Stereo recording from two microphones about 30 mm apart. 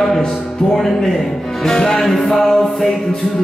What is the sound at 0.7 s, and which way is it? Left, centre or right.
A capella, centre.